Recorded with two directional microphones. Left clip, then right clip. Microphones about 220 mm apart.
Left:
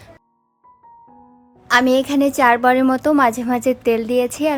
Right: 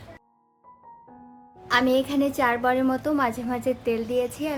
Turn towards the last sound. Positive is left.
turn(degrees=45)  # may be behind; listen again after turning